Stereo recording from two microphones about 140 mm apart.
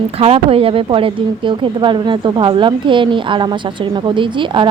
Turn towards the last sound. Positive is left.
turn(degrees=-35)  # may be behind; listen again after turning